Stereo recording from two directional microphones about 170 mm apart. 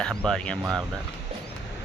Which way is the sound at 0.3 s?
5° left (ahead or behind).